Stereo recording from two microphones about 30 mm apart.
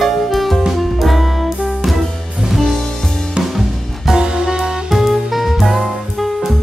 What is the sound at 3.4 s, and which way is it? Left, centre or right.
Music, centre.